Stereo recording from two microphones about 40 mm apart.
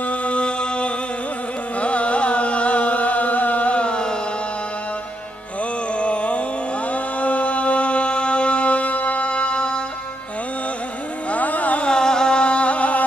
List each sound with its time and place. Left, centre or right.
0.0 s mantra: left
1.8 s music: left
5.9 s a sound: left
6.9 s music: left
11.3 s carnatic music: left
11.8 s music: centre; by 13.0 s left